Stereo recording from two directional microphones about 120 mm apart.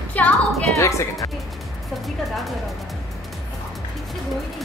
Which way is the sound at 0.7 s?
25° left (ahead or behind).